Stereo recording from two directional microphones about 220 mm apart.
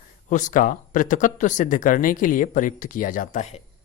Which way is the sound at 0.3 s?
35° left (ahead or behind).